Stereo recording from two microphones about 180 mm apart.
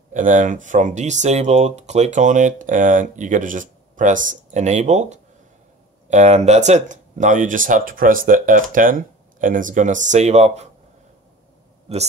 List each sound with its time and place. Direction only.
0.1 s speech: 45° right (ahead or behind)
11.9 s speech: 35° right (ahead or behind)